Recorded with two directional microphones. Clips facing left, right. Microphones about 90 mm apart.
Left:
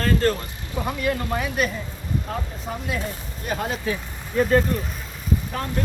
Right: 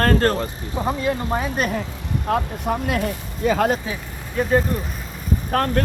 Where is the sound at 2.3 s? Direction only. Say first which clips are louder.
Right 8 dB; 60° right (ahead or behind).